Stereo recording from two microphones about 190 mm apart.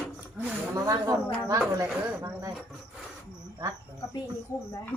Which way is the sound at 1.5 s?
15° right (ahead or behind).